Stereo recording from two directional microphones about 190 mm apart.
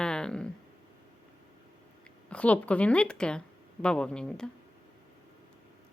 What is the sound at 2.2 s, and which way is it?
Speech, 5° left (ahead or behind).